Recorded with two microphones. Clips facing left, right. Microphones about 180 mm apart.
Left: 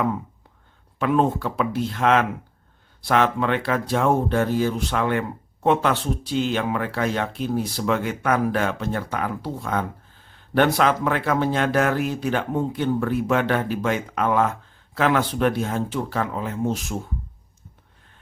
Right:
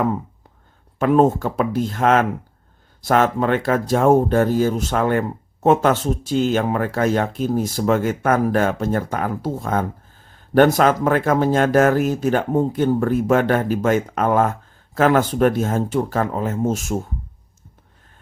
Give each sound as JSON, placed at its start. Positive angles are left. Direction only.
{"t": 0.9, "sound": "speech", "side_deg": -45}